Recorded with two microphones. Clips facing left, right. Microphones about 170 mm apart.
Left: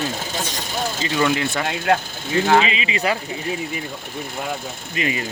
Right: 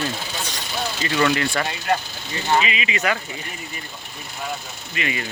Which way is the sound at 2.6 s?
30° left (ahead or behind).